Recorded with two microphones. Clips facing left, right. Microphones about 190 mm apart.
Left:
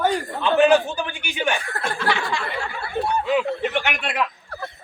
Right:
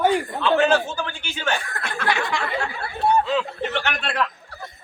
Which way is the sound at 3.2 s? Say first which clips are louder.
Left 3 dB; 15° left (ahead or behind).